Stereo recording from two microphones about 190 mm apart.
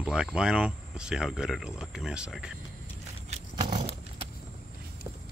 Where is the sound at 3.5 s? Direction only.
25° right (ahead or behind).